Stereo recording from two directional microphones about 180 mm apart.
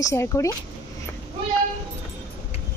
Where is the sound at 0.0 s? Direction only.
15° left (ahead or behind).